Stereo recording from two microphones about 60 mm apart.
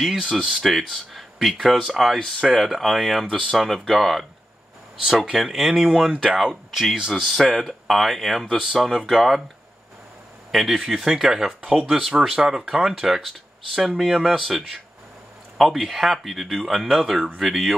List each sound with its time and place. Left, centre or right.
0.0 s speech: centre
2.1 s speech: centre
2.5 s speech: centre
5.3 s speech: centre
10.5 s speech: centre